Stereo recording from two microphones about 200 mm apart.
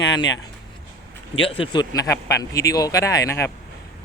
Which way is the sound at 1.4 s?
25° left (ahead or behind).